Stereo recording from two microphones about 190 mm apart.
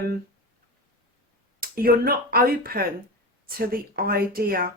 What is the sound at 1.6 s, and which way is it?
Speech, 50° right (ahead or behind).